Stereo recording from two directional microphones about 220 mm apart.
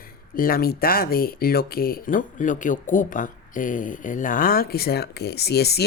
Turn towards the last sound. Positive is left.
turn(degrees=45)  # may be behind; listen again after turning